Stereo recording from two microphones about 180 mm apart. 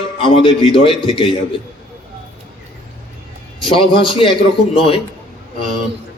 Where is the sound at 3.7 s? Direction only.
30° left (ahead or behind).